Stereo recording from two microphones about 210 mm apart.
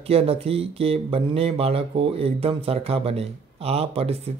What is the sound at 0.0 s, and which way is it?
Speech, 30° right (ahead or behind).